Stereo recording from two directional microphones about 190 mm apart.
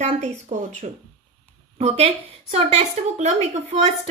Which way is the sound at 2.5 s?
35° right (ahead or behind).